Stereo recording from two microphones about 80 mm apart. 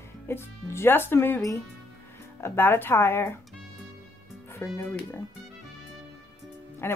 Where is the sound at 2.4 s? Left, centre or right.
Left.